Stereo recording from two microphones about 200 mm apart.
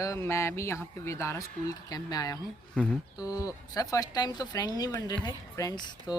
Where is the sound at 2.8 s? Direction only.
5° left (ahead or behind).